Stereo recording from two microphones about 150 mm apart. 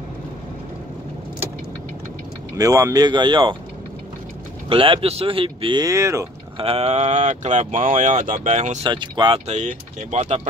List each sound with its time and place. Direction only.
2.5 s speech: 20° right (ahead or behind)
4.6 s speech: 35° right (ahead or behind)
5.9 s speech: 20° right (ahead or behind)
6.6 s speech: 45° right (ahead or behind)
8.8 s speech: 30° right (ahead or behind)
9.5 s speech: 50° right (ahead or behind)